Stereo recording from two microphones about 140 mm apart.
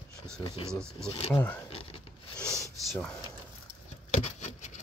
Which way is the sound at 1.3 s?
15° left (ahead or behind).